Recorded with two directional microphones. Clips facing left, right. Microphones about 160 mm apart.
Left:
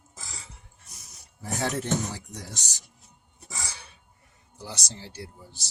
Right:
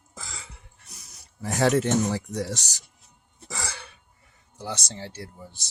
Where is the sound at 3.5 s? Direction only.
65° right (ahead or behind).